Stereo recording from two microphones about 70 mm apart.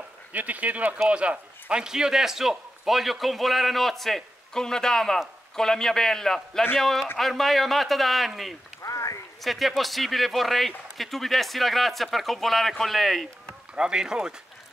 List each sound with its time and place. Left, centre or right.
0.3 s a man's voice: right; by 8.5 s centre
8.8 s a sound: left
9.4 s a man's voice: centre
13.5 s speech: centre